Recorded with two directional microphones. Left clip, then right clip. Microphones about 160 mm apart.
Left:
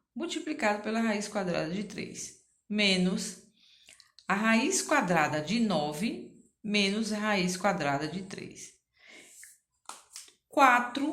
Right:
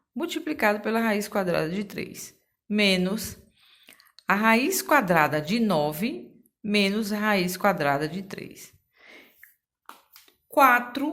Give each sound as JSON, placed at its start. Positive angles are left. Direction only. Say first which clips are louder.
{"t": 0.2, "sound": "a woman's voice", "louder": "right 6 dB", "side_deg": -45}